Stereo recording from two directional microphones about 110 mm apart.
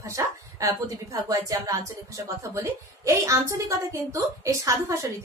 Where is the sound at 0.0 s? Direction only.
30° right (ahead or behind).